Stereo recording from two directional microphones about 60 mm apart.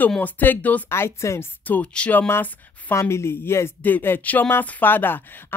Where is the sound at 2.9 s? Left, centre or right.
Left.